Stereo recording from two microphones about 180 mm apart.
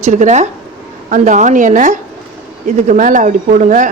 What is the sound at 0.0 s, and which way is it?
A woman's voice, 40° right (ahead or behind).